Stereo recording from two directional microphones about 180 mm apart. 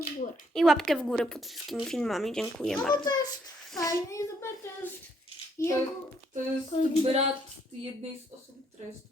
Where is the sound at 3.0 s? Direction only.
20° left (ahead or behind).